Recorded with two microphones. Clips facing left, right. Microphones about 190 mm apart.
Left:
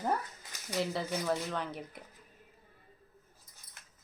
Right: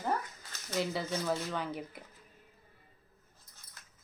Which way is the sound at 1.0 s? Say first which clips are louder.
Even; 10° left (ahead or behind).